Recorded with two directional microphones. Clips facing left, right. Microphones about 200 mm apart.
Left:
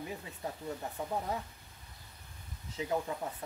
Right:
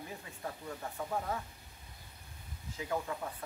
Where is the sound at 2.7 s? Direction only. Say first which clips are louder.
Left 3 dB; 20° left (ahead or behind).